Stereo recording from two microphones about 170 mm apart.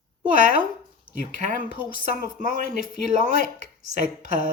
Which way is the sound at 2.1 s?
50° right (ahead or behind).